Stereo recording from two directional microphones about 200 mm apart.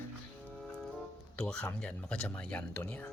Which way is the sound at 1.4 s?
5° left (ahead or behind).